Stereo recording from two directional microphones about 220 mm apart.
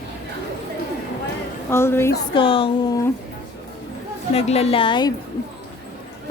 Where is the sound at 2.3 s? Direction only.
25° left (ahead or behind).